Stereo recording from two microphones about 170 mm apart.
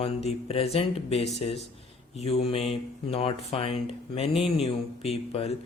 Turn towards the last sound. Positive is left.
turn(degrees=35)  # may be behind; listen again after turning